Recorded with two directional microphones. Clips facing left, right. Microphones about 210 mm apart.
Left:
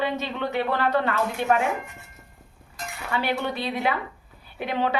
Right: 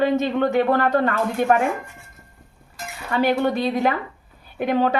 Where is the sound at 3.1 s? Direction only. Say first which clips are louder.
Right 7 dB; 45° right (ahead or behind).